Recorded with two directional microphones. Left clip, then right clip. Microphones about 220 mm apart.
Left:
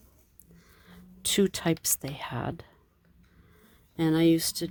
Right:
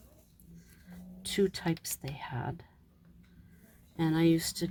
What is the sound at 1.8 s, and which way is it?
Speech, 40° left (ahead or behind).